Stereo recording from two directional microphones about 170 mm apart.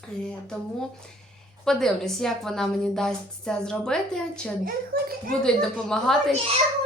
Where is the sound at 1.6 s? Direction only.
Centre (ahead or behind).